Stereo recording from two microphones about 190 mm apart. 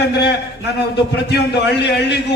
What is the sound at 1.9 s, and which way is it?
Speech, 60° left (ahead or behind).